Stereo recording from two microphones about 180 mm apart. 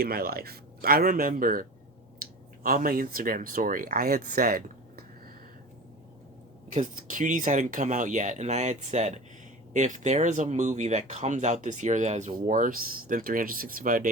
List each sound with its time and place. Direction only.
0.0 s a man's voice: 55° right (ahead or behind)
2.6 s speech: 55° right (ahead or behind)
6.8 s speech: 50° right (ahead or behind)